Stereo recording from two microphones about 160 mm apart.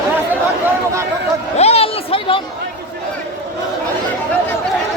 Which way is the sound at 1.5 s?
40° left (ahead or behind).